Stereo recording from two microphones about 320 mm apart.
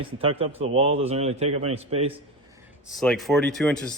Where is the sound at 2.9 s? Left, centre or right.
Centre.